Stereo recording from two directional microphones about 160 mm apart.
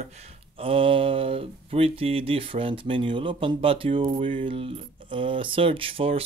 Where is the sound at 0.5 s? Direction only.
35° right (ahead or behind).